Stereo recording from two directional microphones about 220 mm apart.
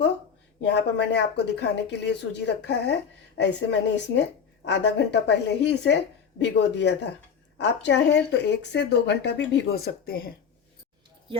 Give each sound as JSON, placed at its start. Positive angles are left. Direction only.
{"t": 0.6, "sound": "speech", "side_deg": 50}